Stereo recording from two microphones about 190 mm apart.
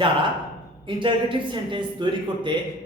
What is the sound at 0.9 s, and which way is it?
A man's voice, 25° right (ahead or behind).